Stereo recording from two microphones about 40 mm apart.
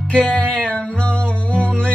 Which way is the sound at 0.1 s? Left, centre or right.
Left.